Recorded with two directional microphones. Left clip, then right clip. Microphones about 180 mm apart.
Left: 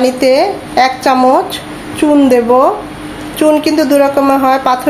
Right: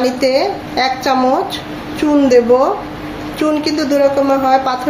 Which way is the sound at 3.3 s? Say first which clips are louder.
Left 6 dB; 55° left (ahead or behind).